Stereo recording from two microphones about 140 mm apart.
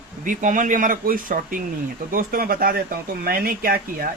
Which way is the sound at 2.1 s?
90° right.